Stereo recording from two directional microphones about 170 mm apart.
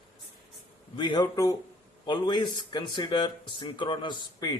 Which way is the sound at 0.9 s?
25° left (ahead or behind).